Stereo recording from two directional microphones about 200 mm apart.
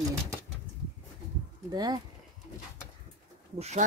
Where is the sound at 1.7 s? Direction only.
20° right (ahead or behind).